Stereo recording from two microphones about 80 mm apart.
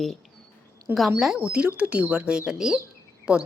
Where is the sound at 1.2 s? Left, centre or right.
Centre.